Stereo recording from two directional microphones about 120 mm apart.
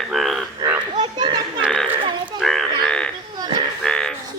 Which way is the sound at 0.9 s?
35° right (ahead or behind).